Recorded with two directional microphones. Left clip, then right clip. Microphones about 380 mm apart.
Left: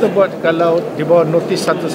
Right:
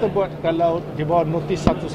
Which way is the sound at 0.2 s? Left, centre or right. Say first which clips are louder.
Left 7 dB; right.